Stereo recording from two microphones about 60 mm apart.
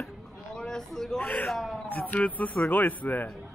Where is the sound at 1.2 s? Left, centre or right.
Left.